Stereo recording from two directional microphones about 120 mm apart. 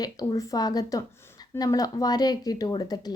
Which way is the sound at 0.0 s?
30° left (ahead or behind).